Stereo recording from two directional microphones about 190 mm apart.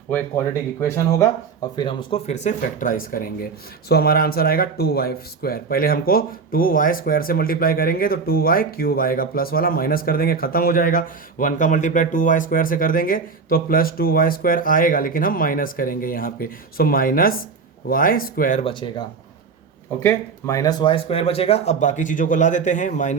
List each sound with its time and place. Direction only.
0.8 s speech: 15° left (ahead or behind); by 18.6 s 45° left (ahead or behind)
18.6 s speech: 25° left (ahead or behind)
20.0 s speech: 15° left (ahead or behind); by 23.1 s 40° left (ahead or behind)